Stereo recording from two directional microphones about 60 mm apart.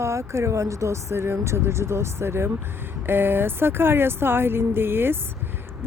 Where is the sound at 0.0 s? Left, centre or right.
Right.